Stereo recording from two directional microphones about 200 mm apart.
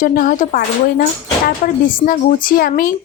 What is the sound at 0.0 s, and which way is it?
A woman's voice, 40° left (ahead or behind).